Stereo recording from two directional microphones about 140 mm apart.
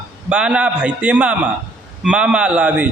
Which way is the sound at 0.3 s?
5° right (ahead or behind).